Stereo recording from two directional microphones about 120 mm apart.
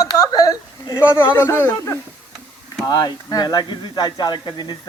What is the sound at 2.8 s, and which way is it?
Speech, 35° left (ahead or behind).